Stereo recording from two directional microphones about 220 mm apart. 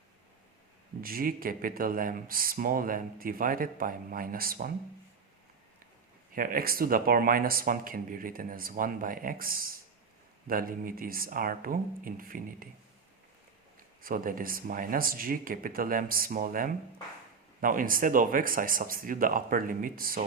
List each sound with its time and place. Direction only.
1.0 s speech: 40° right (ahead or behind)
6.3 s speech: 40° right (ahead or behind)
14.0 s speech: 40° right (ahead or behind)